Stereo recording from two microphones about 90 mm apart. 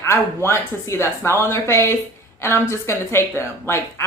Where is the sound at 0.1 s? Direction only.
30° left (ahead or behind).